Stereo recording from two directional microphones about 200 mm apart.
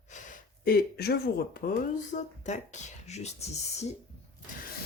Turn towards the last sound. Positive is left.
turn(degrees=35)  # may be behind; listen again after turning